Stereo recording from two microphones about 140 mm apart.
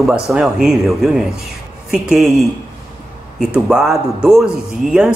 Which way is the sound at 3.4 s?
5° right (ahead or behind).